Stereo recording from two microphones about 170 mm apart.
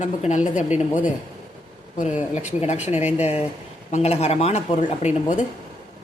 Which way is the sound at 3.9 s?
40° left (ahead or behind).